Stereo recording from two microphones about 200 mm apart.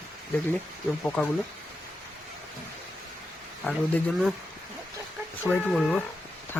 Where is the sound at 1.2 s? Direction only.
Centre (ahead or behind).